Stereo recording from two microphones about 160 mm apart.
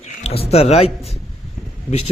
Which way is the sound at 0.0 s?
40° left (ahead or behind).